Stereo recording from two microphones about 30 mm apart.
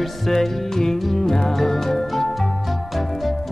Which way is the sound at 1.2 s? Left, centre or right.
Centre.